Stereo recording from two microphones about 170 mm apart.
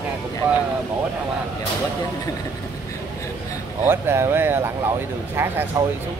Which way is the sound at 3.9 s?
15° right (ahead or behind).